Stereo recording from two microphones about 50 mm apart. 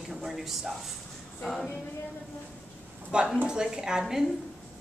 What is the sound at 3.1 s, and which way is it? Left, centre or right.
Speech, centre.